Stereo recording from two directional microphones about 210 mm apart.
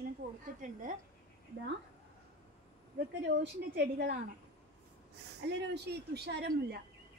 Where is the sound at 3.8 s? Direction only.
50° right (ahead or behind).